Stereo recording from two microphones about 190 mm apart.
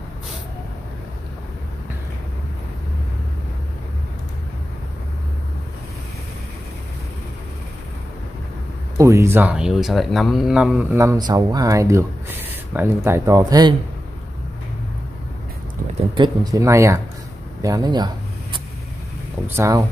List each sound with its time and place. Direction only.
8.9 s speech: 15° right (ahead or behind)
16.2 s speech: 20° right (ahead or behind)
17.6 s a sound: 20° right (ahead or behind)
19.4 s speech: 15° right (ahead or behind)